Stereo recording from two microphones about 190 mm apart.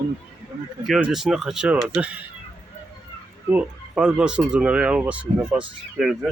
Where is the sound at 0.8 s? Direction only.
Centre (ahead or behind).